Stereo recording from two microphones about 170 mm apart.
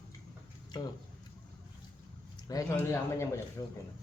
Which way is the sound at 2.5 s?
15° left (ahead or behind).